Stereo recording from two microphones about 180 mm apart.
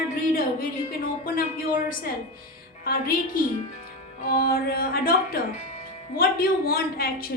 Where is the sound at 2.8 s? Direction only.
55° left (ahead or behind).